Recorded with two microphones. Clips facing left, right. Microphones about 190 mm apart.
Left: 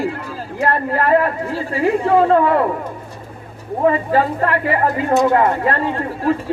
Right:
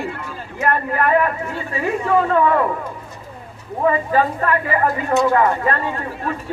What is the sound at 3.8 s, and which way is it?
A woman's voice, 30° left (ahead or behind).